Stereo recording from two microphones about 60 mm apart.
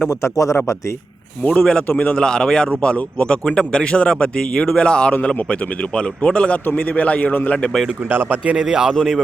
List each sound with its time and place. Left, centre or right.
0.1 s a man's voice: left
1.5 s speech: centre
2.6 s speech: left
8.1 s speech: right
8.4 s speech: centre